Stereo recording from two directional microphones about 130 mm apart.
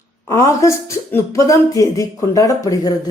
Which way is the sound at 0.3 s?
20° left (ahead or behind).